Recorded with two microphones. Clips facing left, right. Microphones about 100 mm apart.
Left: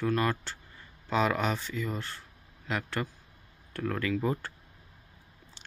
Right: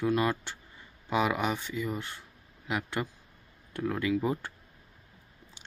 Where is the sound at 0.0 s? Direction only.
15° right (ahead or behind).